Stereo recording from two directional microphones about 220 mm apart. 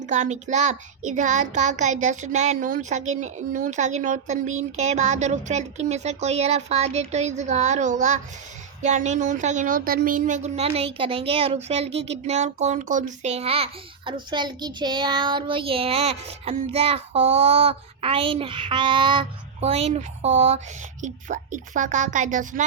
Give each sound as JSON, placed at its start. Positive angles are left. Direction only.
{"t": 0.0, "sound": "speech", "side_deg": -35}